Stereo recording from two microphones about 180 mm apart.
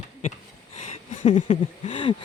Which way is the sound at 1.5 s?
40° left (ahead or behind).